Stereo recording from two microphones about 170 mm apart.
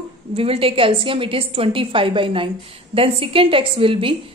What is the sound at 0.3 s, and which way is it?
A woman's voice, 35° right (ahead or behind).